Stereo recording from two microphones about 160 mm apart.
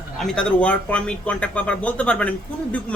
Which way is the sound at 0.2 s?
5° left (ahead or behind).